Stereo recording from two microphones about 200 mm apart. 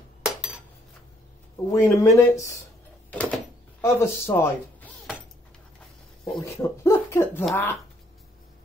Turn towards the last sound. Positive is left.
turn(degrees=15)  # may be behind; listen again after turning